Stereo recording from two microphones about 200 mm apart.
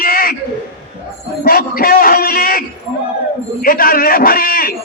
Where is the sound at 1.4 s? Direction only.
50° left (ahead or behind).